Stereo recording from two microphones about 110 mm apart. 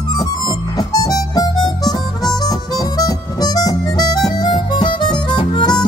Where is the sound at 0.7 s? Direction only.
35° left (ahead or behind).